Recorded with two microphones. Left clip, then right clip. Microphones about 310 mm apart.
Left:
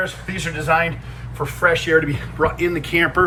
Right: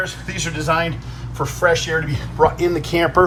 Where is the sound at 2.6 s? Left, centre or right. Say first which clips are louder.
Even; centre.